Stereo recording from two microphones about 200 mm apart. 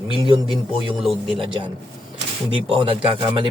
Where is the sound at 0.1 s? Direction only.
25° right (ahead or behind).